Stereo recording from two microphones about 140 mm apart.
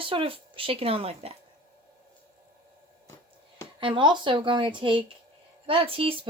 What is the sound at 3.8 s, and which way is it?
Speech, 35° right (ahead or behind).